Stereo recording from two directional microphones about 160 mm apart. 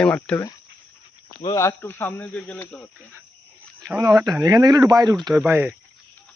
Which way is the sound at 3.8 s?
15° right (ahead or behind).